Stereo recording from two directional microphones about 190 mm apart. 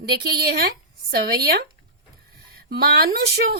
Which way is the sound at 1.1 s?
55° right (ahead or behind).